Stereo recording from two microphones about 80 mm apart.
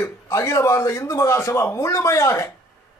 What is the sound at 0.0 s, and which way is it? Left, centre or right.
A man's voice, left.